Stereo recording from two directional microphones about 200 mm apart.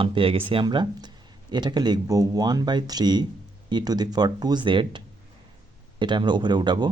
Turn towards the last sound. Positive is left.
turn(degrees=-20)  # may be behind; listen again after turning